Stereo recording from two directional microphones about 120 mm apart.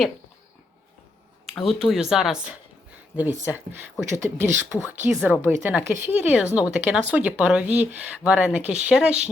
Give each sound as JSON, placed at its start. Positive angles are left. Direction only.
{"t": 1.6, "sound": "speech", "side_deg": 0}